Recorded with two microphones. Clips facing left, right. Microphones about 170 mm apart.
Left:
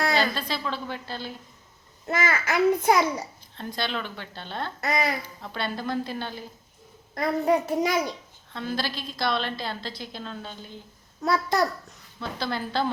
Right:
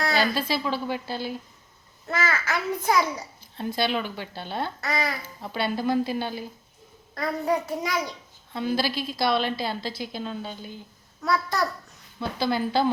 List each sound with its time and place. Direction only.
0.1 s a woman's voice: 5° right (ahead or behind)
2.0 s a child's voice: 20° left (ahead or behind)
3.6 s a woman's voice: 5° right (ahead or behind)
4.9 s a child's voice: 20° left (ahead or behind)
5.2 s a woman's voice: 5° right (ahead or behind)
7.1 s a child's voice: 25° left (ahead or behind)
8.5 s a woman's voice: 5° right (ahead or behind)
11.2 s a child's voice: 25° left (ahead or behind)
12.2 s a woman's voice: 5° right (ahead or behind)